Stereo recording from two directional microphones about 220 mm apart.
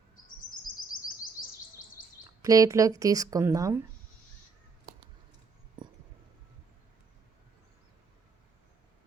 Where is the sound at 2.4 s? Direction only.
15° right (ahead or behind).